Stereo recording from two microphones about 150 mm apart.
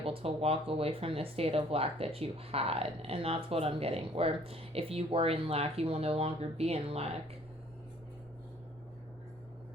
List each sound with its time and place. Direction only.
0.0 s speech: 40° right (ahead or behind)